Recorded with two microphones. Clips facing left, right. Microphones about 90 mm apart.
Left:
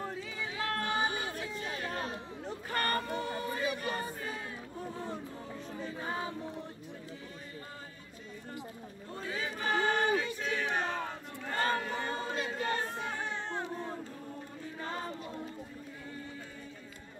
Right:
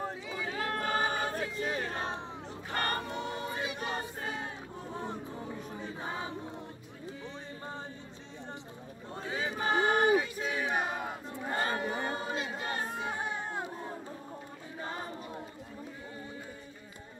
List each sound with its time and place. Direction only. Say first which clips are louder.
0.0 s a sound: right 2 dB; 25° right (ahead or behind)
0.8 s choir: right 4 dB; 45° right (ahead or behind)
1.6 s chatter: right 2 dB; 40° right (ahead or behind)
2.7 s choir: left 1 dB; 25° right (ahead or behind)
5.7 s choir: left 1 dB; 20° right (ahead or behind)
9.1 s choir: right 2 dB; 25° right (ahead or behind)
12.5 s crowd: left 1 dB; 20° right (ahead or behind)